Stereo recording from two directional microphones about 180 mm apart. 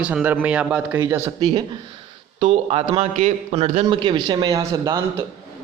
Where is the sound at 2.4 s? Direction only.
35° right (ahead or behind).